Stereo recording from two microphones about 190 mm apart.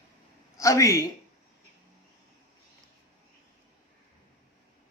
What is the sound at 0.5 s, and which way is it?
Speech, 15° left (ahead or behind).